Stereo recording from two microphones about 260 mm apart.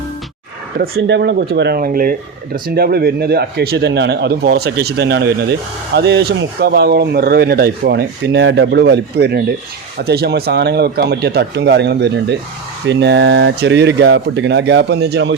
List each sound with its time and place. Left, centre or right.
0.8 s speech: right